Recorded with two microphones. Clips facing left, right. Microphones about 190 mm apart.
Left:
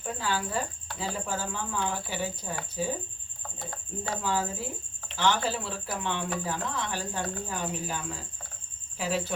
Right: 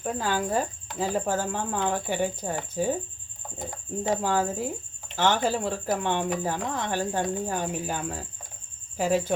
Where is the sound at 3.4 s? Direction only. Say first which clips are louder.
Right 4 dB; 20° right (ahead or behind).